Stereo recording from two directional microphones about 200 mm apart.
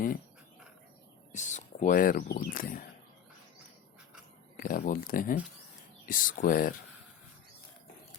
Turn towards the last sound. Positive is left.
turn(degrees=45)  # may be behind; listen again after turning